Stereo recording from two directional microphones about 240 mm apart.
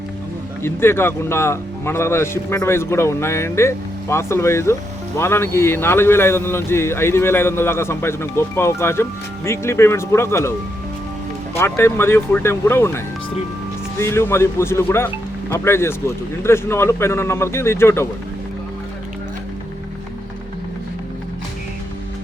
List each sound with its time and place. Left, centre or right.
0.6 s speech: centre
11.5 s speech: centre
14.0 s speech: centre